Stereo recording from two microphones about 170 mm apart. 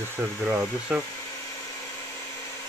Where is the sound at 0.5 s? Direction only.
5° right (ahead or behind).